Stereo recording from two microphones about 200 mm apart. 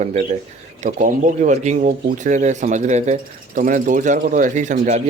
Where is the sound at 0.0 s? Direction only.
35° right (ahead or behind).